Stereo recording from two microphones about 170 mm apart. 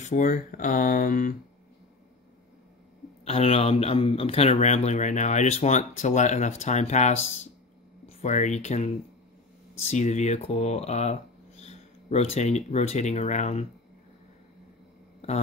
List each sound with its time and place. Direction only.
0.0 s speech: 50° left (ahead or behind)
3.3 s speech: 35° left (ahead or behind)